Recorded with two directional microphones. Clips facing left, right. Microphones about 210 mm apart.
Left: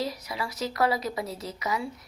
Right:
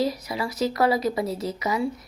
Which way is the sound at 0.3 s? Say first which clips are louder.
Right 6 dB; 40° right (ahead or behind).